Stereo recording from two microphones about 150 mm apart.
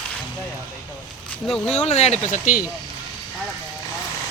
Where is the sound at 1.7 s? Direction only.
45° left (ahead or behind); by 2.6 s 60° left (ahead or behind).